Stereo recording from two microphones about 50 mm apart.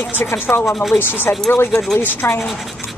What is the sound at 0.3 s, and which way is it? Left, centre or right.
Speech, left.